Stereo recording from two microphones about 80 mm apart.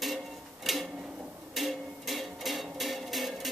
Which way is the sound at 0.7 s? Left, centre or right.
Centre.